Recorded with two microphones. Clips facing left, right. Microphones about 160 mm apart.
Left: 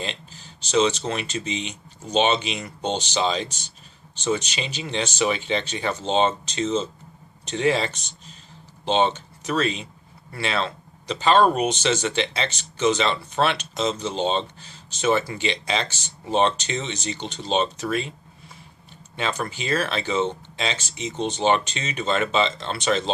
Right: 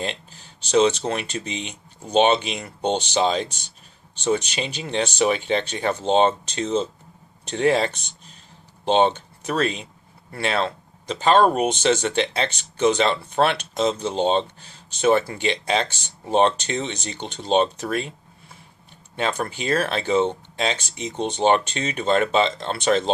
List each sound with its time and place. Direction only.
0.7 s speech: 55° right (ahead or behind)
19.1 s speech: 50° right (ahead or behind)